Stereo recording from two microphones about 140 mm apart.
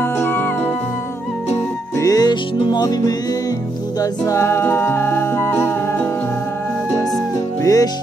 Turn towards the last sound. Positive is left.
turn(degrees=25)  # may be behind; listen again after turning